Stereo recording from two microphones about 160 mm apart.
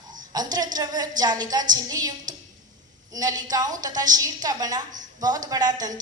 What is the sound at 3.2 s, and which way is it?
A woman's voice, 25° right (ahead or behind).